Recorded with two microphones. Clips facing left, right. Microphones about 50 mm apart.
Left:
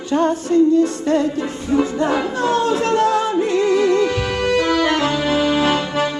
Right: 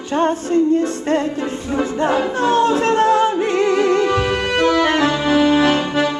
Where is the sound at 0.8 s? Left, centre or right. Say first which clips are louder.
Left 2 dB; right.